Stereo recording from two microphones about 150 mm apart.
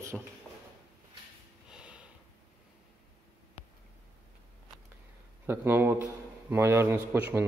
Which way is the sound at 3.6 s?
40° left (ahead or behind).